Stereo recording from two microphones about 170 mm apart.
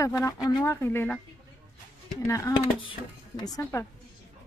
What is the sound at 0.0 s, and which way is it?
Speech, 20° left (ahead or behind).